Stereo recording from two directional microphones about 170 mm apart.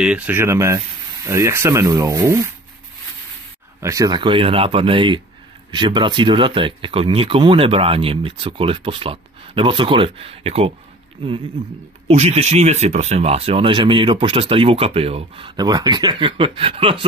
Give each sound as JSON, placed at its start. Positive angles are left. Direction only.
{"t": 0.0, "sound": "speech", "side_deg": -10}
{"t": 3.8, "sound": "speech", "side_deg": -20}
{"t": 12.1, "sound": "speech", "side_deg": -40}